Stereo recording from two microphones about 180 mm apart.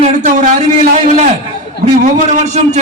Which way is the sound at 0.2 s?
40° right (ahead or behind).